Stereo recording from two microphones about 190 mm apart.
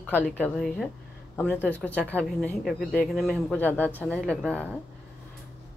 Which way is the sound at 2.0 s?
5° left (ahead or behind).